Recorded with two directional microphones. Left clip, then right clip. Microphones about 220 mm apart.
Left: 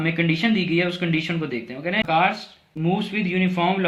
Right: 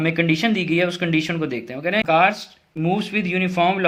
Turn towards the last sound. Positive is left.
turn(degrees=-50)  # may be behind; listen again after turning